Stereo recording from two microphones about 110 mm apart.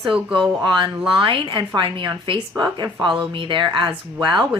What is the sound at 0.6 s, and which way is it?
Speech, 45° right (ahead or behind).